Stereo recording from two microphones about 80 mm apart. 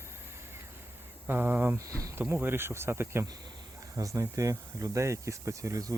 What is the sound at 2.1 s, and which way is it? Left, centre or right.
Speech, right.